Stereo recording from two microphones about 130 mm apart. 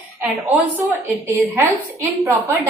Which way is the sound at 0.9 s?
15° right (ahead or behind).